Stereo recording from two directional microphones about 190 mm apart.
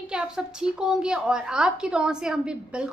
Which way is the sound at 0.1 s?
5° right (ahead or behind).